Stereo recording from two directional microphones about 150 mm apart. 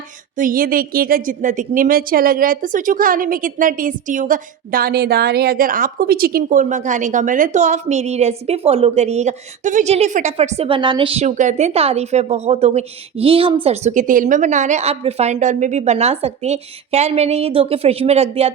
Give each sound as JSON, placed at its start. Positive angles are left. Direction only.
{"t": 0.3, "sound": "a woman's voice", "side_deg": -70}
{"t": 10.7, "sound": "a woman's voice", "side_deg": -30}
{"t": 13.9, "sound": "a woman's voice", "side_deg": -60}